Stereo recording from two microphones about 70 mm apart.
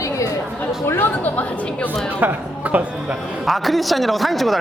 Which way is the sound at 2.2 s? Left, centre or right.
Right.